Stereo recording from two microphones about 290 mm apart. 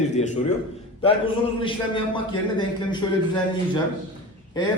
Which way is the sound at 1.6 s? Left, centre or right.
Centre.